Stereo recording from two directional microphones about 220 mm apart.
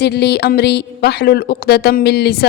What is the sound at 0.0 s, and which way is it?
A woman's voice, 50° left (ahead or behind).